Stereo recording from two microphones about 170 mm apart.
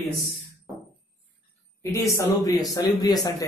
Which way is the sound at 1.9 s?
20° left (ahead or behind).